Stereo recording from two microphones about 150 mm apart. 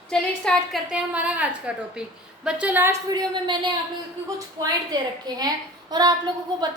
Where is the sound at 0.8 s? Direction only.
10° right (ahead or behind); by 6.6 s 25° right (ahead or behind).